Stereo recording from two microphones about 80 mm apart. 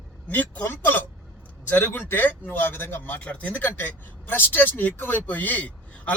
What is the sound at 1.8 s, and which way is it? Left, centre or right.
Speech, left.